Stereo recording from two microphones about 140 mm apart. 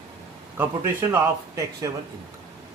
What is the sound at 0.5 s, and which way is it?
Speech, 15° right (ahead or behind).